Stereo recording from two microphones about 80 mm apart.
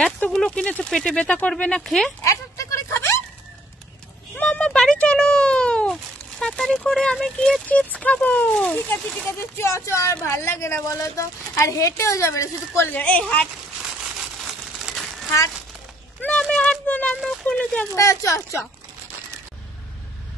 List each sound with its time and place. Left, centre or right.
0.2 s speech: centre
1.8 s speech: centre
2.2 s a sound: left
4.4 s a sound: centre
6.4 s speech: centre
7.6 s speech: centre
9.0 s speech: centre
9.3 s a woman's voice: left
12.9 s speech: centre
16.3 s a sound: centre
17.2 s speech: centre
17.5 s speech: centre
17.9 s a woman's voice: left